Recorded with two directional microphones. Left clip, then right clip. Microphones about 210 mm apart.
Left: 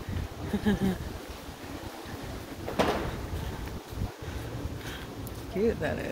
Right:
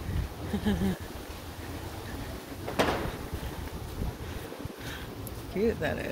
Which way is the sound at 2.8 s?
25° right (ahead or behind).